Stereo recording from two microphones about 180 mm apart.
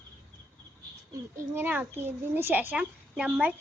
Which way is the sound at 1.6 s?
10° right (ahead or behind).